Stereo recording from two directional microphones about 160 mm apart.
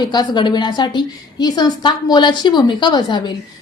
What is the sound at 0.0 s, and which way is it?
A woman's voice, 25° left (ahead or behind).